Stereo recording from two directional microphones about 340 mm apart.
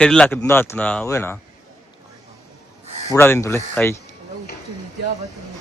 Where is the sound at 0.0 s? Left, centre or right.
Centre.